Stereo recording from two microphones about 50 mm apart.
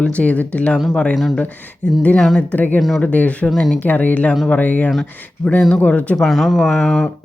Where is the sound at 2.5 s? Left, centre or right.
Left.